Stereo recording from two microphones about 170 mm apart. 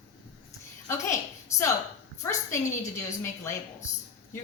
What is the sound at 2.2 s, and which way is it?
A woman's voice, 15° left (ahead or behind).